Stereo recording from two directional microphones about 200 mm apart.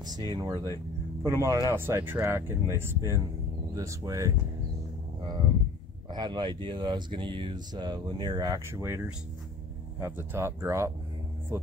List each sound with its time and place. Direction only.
0.3 s speech: 20° right (ahead or behind)
6.0 s speech: 20° right (ahead or behind)